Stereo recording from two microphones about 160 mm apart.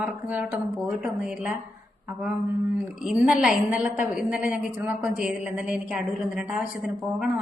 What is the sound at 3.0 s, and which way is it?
A woman's voice, 5° right (ahead or behind).